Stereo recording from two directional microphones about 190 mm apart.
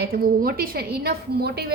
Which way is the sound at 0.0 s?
50° right (ahead or behind).